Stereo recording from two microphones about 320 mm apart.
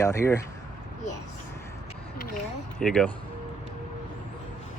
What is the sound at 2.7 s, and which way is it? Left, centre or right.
Speech, centre.